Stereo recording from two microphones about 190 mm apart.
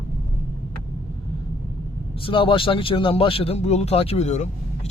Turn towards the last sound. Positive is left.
turn(degrees=35)  # may be behind; listen again after turning